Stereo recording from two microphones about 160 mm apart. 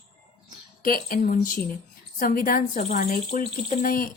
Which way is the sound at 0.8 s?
60° left (ahead or behind).